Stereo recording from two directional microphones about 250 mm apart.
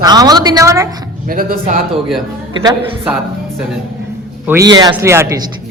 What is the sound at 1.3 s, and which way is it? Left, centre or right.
Speech, right.